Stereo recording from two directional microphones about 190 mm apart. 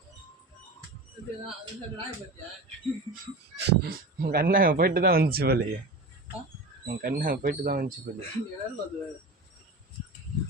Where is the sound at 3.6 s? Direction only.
60° right (ahead or behind).